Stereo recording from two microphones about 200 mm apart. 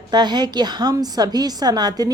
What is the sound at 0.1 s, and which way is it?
A woman's voice, 20° right (ahead or behind).